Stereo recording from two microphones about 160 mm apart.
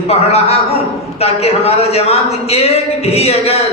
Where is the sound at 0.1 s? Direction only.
40° left (ahead or behind).